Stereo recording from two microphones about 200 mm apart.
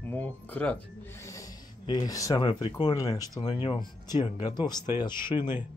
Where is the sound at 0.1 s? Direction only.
10° left (ahead or behind).